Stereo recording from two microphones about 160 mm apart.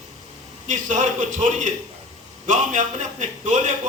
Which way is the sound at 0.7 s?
50° right (ahead or behind).